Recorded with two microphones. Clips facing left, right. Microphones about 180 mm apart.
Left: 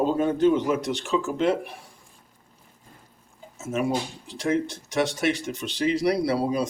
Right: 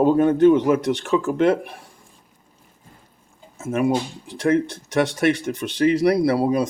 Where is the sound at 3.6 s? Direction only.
55° right (ahead or behind).